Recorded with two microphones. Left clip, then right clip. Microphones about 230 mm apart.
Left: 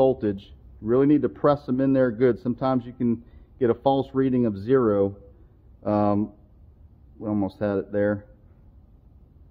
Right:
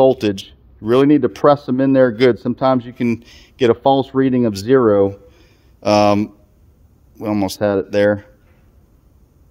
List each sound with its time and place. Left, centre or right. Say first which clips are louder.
0.0 s speech: right 8 dB; right